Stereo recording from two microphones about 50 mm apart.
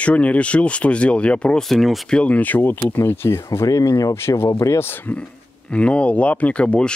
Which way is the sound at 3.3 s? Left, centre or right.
Left.